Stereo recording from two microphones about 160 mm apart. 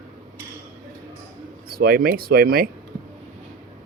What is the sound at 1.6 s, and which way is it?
Speech, 70° right (ahead or behind).